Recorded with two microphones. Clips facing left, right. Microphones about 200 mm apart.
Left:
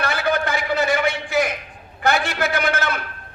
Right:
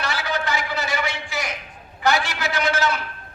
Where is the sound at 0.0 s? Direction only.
55° left (ahead or behind).